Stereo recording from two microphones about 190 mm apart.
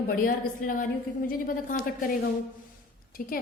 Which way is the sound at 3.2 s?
50° left (ahead or behind).